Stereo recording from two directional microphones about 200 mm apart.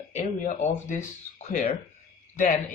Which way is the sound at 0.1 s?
40° left (ahead or behind).